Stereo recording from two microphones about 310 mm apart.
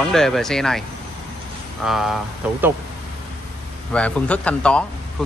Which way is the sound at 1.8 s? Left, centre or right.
Centre.